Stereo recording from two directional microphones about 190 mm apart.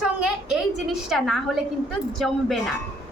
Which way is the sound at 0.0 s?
Centre (ahead or behind).